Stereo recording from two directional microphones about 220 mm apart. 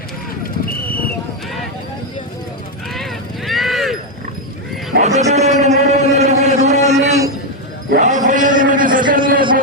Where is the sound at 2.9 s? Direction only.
Centre (ahead or behind).